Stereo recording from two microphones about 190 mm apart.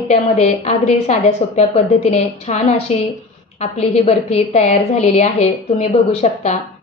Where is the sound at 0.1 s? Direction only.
35° left (ahead or behind).